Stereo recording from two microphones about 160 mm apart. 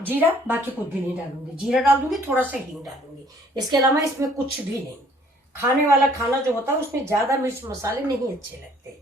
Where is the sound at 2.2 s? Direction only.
10° right (ahead or behind).